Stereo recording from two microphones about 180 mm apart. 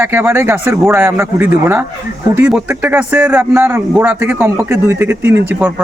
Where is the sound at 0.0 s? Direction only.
10° right (ahead or behind).